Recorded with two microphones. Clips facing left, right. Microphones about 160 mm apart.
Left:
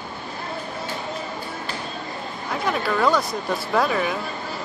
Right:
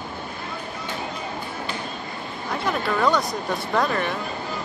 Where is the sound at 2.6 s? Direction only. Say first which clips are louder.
Left 1 dB; centre (ahead or behind).